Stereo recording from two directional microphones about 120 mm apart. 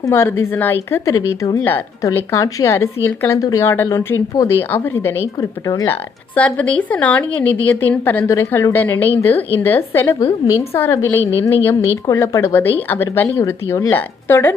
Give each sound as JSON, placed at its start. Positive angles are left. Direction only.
{"t": 0.0, "sound": "speech", "side_deg": 20}
{"t": 5.9, "sound": "speech", "side_deg": 10}